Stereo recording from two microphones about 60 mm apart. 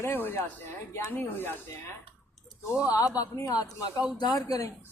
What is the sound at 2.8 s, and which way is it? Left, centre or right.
Speech, left.